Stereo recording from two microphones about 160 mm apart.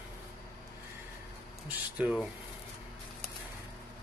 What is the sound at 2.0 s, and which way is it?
Speech, 5° right (ahead or behind).